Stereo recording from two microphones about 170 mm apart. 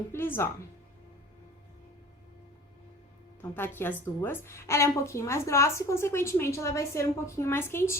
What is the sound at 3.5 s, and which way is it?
A woman's voice, 10° left (ahead or behind).